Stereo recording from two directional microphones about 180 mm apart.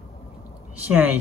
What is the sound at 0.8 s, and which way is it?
Speech, 10° right (ahead or behind).